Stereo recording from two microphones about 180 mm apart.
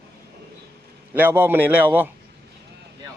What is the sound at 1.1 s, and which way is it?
A man's voice, 10° right (ahead or behind).